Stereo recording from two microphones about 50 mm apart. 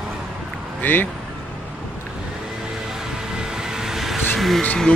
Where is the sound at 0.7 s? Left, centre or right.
Left.